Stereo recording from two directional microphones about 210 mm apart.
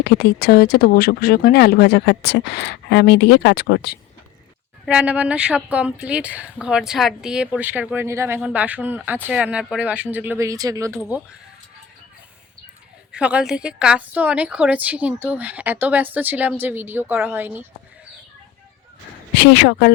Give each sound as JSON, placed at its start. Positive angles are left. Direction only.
{"t": 0.0, "sound": "speech", "side_deg": 50}
{"t": 4.9, "sound": "speech", "side_deg": -5}
{"t": 13.1, "sound": "speech", "side_deg": -5}
{"t": 19.3, "sound": "speech", "side_deg": 55}